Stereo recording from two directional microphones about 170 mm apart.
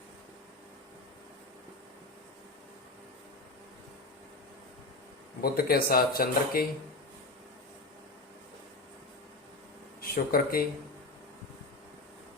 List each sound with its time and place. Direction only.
5.4 s speech: 60° left (ahead or behind)
10.0 s speech: 60° left (ahead or behind)